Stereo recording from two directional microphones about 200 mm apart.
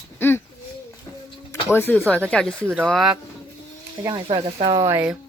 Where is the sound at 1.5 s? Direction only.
15° left (ahead or behind).